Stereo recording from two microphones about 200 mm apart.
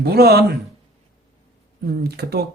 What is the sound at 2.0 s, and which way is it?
Speech, 55° right (ahead or behind).